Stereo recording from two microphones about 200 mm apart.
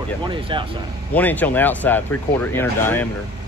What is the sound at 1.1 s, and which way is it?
Speech, 10° left (ahead or behind).